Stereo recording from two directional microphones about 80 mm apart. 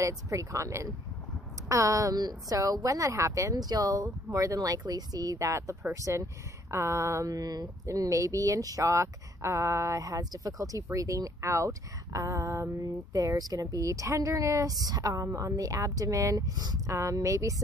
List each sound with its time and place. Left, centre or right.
0.0 s a woman's voice: right
16.9 s speech: right